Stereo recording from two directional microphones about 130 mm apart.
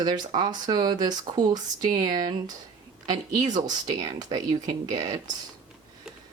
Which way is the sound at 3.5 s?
30° right (ahead or behind).